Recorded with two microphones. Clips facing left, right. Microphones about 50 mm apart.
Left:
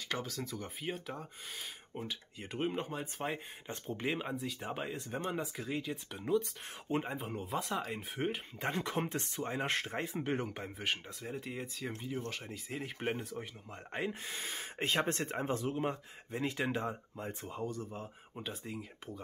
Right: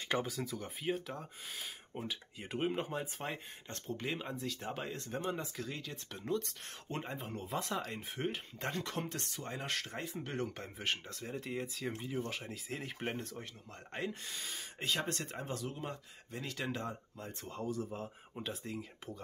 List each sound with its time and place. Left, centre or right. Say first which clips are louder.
0.1 s speech: right 4 dB; centre
0.4 s speech: even; centre
3.6 s speech: left 3 dB; centre
10.4 s speech: left 1 dB; centre
13.9 s speech: left 2 dB; centre
14.3 s speech: left 3 dB; left; by 17.6 s centre
17.6 s speech: right 2 dB; centre